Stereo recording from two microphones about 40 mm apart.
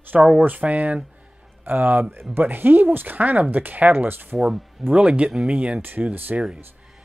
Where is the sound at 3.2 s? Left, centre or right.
Right.